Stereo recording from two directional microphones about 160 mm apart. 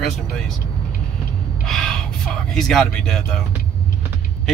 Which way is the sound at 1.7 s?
Centre (ahead or behind).